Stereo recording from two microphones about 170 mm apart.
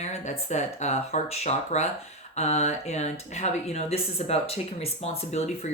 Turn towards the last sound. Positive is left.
turn(degrees=40)  # may be behind; listen again after turning